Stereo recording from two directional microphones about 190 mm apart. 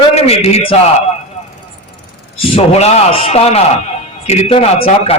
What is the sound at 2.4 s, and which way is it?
A man's voice, 30° left (ahead or behind).